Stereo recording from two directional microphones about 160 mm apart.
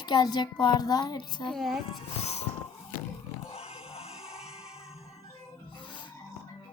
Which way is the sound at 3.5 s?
40° left (ahead or behind).